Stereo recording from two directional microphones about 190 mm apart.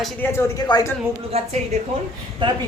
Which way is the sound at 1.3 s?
30° right (ahead or behind).